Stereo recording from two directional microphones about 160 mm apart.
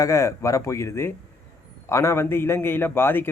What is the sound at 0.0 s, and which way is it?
A man's voice, 20° left (ahead or behind).